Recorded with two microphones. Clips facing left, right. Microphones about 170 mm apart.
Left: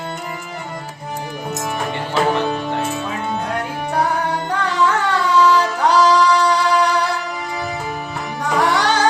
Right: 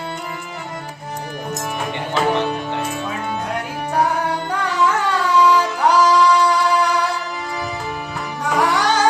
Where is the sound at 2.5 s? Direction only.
45° left (ahead or behind).